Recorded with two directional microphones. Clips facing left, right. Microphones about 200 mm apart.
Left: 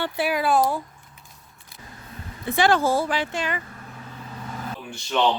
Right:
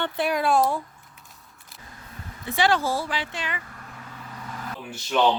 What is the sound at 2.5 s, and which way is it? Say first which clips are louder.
Speech: left 3 dB; 50° left (ahead or behind).